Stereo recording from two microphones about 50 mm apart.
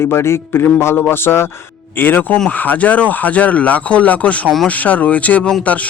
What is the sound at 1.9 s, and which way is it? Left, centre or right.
Speech, left.